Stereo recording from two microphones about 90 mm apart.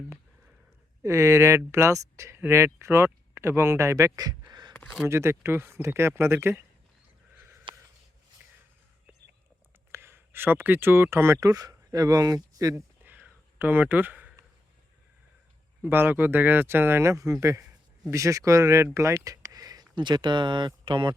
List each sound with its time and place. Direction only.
1.0 s speech: 35° right (ahead or behind)
5.0 s speech: 30° right (ahead or behind)
7.7 s a sound: 65° right (ahead or behind)
9.9 s speech: 25° right (ahead or behind)
13.0 s a sound: 20° right (ahead or behind)
15.8 s speech: 25° right (ahead or behind); by 21.2 s 65° right (ahead or behind)